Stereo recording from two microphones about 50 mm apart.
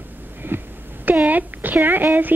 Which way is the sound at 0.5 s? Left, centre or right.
Right.